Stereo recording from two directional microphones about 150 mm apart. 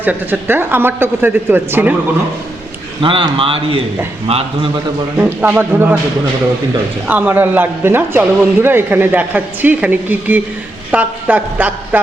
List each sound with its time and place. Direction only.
0.0 s speech: 10° right (ahead or behind)
3.0 s a man's voice: 35° right (ahead or behind)
5.1 s speech: 10° right (ahead or behind)
7.1 s speech: 10° right (ahead or behind)